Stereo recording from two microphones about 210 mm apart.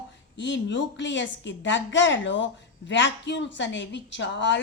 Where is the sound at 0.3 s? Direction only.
60° left (ahead or behind).